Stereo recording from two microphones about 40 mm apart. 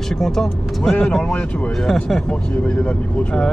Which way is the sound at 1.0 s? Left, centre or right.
Left.